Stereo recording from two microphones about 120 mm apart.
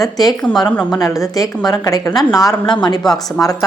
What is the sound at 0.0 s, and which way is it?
A woman's voice, 30° left (ahead or behind).